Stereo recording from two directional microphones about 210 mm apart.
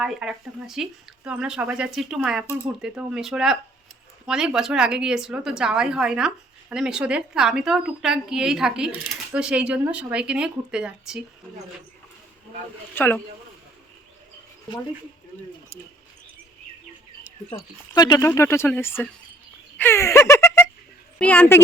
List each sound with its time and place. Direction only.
0.0 s a woman's voice: 5° right (ahead or behind)
12.9 s speech: 10° left (ahead or behind)
17.5 s speech: 20° left (ahead or behind)
19.7 s a sound: 10° left (ahead or behind)
21.2 s speech: 5° left (ahead or behind)